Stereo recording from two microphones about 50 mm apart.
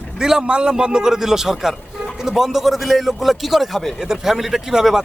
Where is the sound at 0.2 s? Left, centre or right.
Centre.